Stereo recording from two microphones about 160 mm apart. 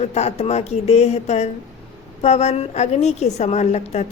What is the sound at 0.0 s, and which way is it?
A woman's voice, 45° left (ahead or behind).